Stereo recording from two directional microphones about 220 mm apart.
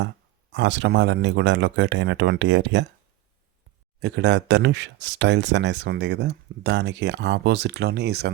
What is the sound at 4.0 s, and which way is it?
Speech, 50° right (ahead or behind).